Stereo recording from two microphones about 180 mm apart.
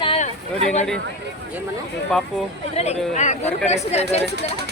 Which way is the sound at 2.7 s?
35° left (ahead or behind).